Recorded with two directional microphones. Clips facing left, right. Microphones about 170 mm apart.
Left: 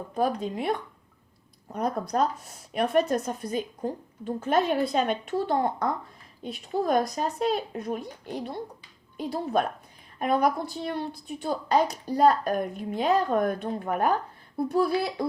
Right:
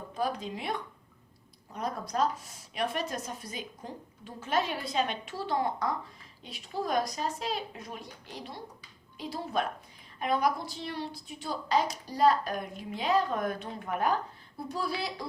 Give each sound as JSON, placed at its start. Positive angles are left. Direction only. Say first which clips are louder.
{"t": 0.2, "sound": "a woman's voice", "louder": "left 6 dB", "side_deg": 50}